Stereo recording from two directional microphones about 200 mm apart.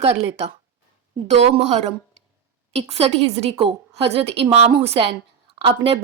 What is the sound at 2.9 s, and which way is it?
A woman's voice, 30° right (ahead or behind).